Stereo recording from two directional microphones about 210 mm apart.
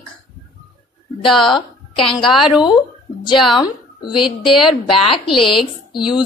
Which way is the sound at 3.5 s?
20° left (ahead or behind).